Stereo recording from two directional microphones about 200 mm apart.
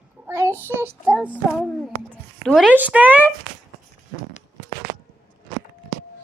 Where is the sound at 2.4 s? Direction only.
Centre (ahead or behind).